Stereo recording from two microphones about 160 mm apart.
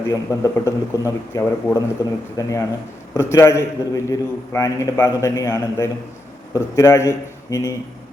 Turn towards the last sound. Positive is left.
turn(degrees=20)  # may be behind; listen again after turning